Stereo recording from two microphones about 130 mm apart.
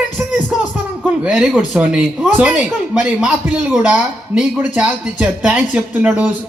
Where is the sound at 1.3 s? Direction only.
Centre (ahead or behind).